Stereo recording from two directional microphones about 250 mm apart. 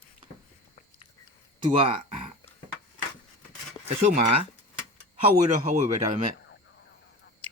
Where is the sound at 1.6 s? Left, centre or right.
Right.